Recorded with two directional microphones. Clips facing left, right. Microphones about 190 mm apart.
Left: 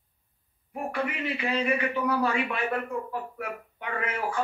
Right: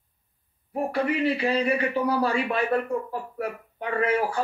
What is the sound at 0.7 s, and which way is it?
A man's voice, 35° right (ahead or behind).